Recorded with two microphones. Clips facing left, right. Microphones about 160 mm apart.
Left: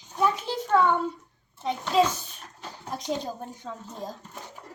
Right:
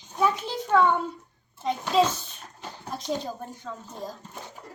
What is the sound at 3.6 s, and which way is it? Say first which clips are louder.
Speech: even; 20° left (ahead or behind).